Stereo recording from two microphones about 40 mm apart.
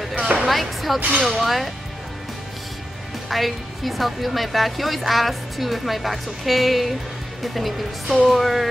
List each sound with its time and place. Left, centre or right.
0.5 s a sound: centre
0.9 s speech: right
1.2 s a woman's voice: centre
3.3 s a woman's voice: centre